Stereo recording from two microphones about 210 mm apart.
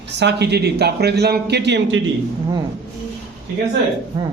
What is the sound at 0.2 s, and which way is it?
A man's voice, 55° right (ahead or behind).